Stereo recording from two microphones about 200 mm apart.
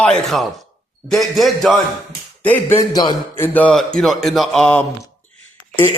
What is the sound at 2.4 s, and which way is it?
A man's voice, 10° left (ahead or behind).